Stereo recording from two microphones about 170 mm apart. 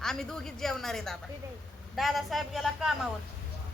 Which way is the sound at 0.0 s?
5° left (ahead or behind).